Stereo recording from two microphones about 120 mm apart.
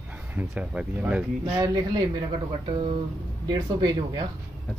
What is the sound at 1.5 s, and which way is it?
Speech, 35° right (ahead or behind).